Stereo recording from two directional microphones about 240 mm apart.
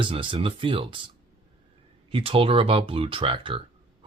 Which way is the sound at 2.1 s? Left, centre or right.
Right.